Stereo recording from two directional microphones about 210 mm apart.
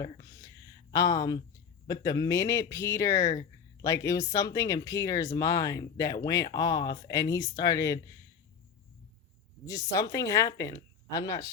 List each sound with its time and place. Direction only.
0.0 s a sound: 15° left (ahead or behind)
1.9 s speech: 20° left (ahead or behind)
9.6 s speech: 15° left (ahead or behind)